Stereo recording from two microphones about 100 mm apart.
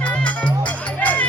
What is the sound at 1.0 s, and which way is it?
Music, 15° left (ahead or behind).